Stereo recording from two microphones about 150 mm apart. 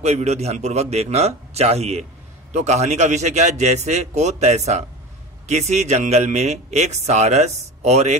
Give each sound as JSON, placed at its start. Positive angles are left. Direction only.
{"t": 0.0, "sound": "speech", "side_deg": -45}